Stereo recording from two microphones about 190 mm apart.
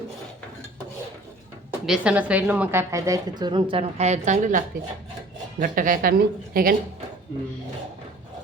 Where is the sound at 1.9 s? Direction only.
5° right (ahead or behind); by 6.7 s 50° right (ahead or behind).